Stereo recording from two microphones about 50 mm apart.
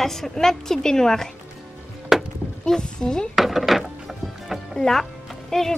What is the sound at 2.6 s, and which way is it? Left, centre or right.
Speech, centre.